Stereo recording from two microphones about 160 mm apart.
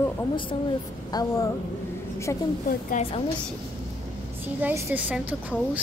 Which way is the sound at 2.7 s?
60° left (ahead or behind).